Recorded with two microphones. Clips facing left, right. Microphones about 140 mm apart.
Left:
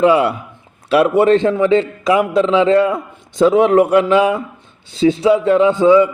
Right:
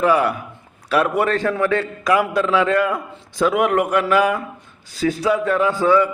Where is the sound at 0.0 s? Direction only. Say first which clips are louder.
Left 5 dB; 25° left (ahead or behind).